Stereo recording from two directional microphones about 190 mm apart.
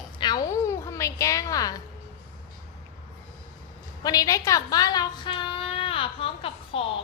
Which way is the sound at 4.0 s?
20° left (ahead or behind).